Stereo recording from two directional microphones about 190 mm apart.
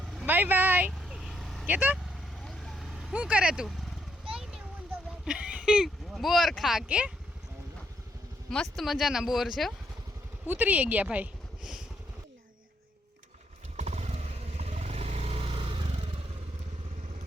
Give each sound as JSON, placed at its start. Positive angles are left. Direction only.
{"t": 0.0, "sound": "vehicle", "side_deg": -5}
{"t": 2.4, "sound": "vehicle", "side_deg": 0}
{"t": 4.4, "sound": "a sound", "side_deg": -5}
{"t": 8.4, "sound": "speech", "side_deg": 0}
{"t": 13.7, "sound": "vehicle", "side_deg": -35}